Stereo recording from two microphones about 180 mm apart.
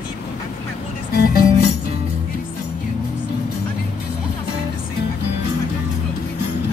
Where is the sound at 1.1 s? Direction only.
60° left (ahead or behind).